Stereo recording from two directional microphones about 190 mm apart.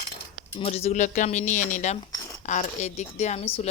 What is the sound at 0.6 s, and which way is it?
Speech, 35° left (ahead or behind).